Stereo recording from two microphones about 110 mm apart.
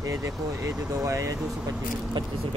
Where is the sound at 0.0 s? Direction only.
30° right (ahead or behind).